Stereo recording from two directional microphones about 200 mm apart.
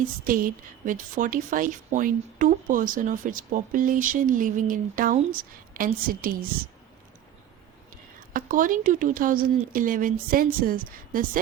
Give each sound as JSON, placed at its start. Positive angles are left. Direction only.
{"t": 0.0, "sound": "a woman's voice", "side_deg": -45}
{"t": 8.3, "sound": "a woman's voice", "side_deg": -45}